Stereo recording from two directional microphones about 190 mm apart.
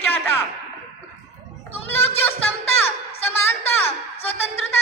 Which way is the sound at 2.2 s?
10° left (ahead or behind).